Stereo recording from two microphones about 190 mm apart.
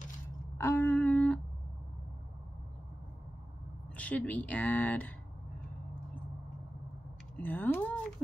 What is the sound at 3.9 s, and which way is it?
A woman's voice, 5° left (ahead or behind).